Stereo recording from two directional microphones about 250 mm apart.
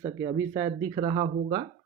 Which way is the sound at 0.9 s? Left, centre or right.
Centre.